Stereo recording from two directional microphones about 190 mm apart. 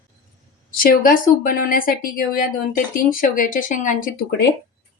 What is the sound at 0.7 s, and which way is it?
Speech, 50° left (ahead or behind).